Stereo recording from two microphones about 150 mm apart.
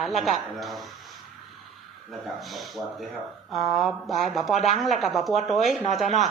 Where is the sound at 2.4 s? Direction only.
Centre (ahead or behind).